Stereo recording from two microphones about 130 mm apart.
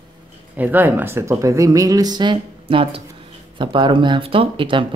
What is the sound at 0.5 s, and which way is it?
Speech, 15° right (ahead or behind).